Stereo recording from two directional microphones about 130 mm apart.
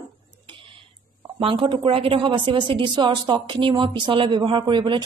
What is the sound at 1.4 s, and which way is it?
Speech, 45° right (ahead or behind).